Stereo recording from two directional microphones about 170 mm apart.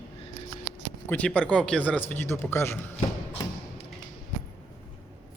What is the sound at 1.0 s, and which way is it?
Speech, 10° left (ahead or behind).